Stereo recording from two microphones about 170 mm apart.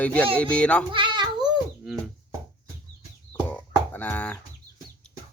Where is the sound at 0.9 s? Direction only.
30° right (ahead or behind).